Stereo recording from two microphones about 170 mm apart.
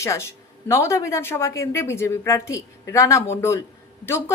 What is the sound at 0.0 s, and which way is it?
Speech, 15° left (ahead or behind).